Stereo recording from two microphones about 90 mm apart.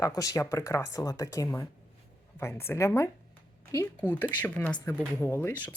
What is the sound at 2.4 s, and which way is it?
Speech, 25° left (ahead or behind).